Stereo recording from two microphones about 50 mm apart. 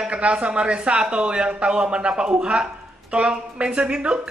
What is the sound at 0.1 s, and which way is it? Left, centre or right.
Speech, right.